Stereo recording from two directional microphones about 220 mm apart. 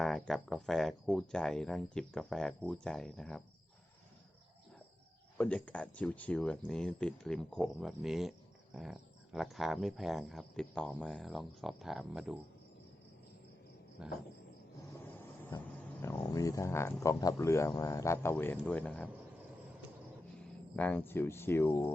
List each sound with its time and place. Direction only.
0.0 s speech: centre (ahead or behind)
5.4 s speech: 5° left (ahead or behind)
14.0 s speech: 5° right (ahead or behind)
15.4 s speech: 15° left (ahead or behind)
20.7 s speech: 5° left (ahead or behind)